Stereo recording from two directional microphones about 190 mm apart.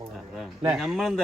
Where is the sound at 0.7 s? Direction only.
Centre (ahead or behind).